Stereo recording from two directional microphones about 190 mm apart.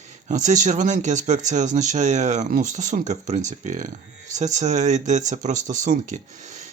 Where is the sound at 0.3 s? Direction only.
40° right (ahead or behind).